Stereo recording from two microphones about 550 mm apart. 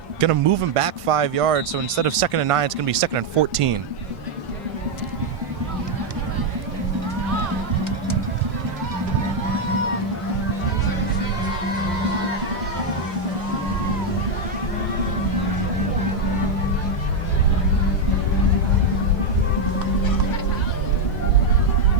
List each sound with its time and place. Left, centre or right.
0.2 s speech: right